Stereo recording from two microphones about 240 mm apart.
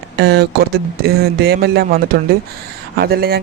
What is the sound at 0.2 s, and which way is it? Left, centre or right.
Speech, right.